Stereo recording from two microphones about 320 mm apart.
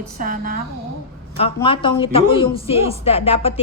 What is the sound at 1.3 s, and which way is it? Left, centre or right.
A woman's voice, centre.